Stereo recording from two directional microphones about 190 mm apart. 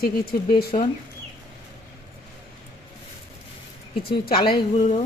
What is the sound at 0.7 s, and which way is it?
Speech, 40° left (ahead or behind).